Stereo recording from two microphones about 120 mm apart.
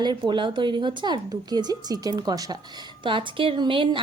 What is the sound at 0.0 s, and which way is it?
A woman's voice, 40° right (ahead or behind).